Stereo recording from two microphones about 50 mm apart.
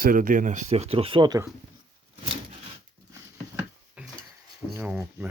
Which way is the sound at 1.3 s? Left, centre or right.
Right.